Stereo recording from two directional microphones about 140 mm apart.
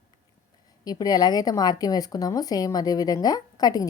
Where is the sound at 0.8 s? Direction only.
25° left (ahead or behind).